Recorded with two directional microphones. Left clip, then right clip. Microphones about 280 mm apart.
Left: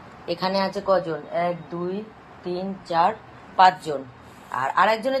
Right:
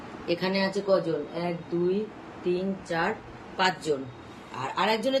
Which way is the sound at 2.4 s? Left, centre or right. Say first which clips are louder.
Right 1 dB; centre.